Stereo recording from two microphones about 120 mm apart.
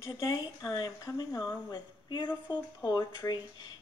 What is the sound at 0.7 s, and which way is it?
Speech, 30° left (ahead or behind).